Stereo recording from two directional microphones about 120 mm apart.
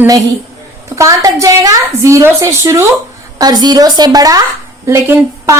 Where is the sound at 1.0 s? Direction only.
25° right (ahead or behind).